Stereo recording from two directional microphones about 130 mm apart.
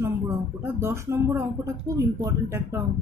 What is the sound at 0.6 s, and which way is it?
Speech, 20° right (ahead or behind).